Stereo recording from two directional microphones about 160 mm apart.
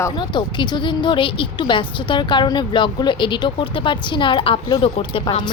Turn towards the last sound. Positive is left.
turn(degrees=30)  # may be behind; listen again after turning